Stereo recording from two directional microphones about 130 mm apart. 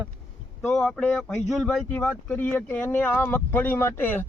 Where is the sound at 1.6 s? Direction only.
10° left (ahead or behind).